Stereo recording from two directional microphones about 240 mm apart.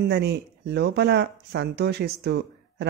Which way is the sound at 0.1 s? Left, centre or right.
Right.